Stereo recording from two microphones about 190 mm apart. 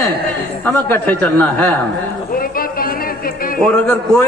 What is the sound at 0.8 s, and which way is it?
Speech, 10° left (ahead or behind).